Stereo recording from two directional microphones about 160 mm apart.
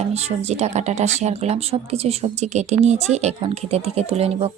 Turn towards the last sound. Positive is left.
turn(degrees=-40)  # may be behind; listen again after turning